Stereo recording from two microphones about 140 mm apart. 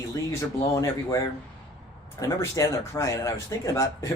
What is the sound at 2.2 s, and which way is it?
Speech, 25° left (ahead or behind).